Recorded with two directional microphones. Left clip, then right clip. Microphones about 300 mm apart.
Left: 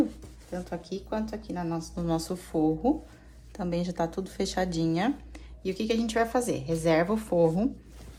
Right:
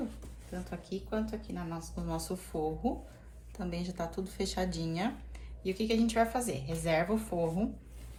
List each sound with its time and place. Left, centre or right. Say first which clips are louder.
0.9 s speech: left 1 dB; left